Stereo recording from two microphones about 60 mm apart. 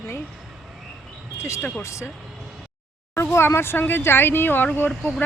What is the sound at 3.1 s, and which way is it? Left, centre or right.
Speech, left.